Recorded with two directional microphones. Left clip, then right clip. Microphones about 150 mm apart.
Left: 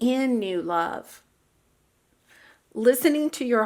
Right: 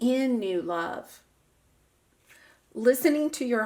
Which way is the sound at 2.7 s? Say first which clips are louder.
Left 2 dB; 25° left (ahead or behind).